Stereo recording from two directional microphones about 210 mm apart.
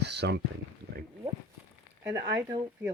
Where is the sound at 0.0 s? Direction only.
55° right (ahead or behind).